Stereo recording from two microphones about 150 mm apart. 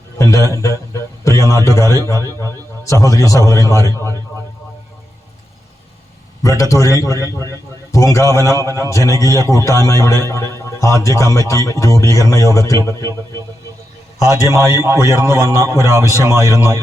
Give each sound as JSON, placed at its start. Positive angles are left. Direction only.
{"t": 0.2, "sound": "a man's voice", "side_deg": 20}
{"t": 6.6, "sound": "a man's voice", "side_deg": 20}
{"t": 14.4, "sound": "a man's voice", "side_deg": -20}